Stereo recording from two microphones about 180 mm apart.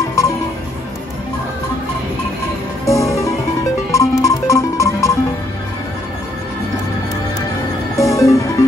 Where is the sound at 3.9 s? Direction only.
20° left (ahead or behind).